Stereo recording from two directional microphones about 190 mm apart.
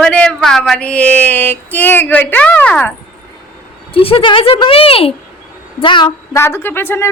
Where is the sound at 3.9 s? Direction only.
30° left (ahead or behind); by 7.1 s 10° left (ahead or behind).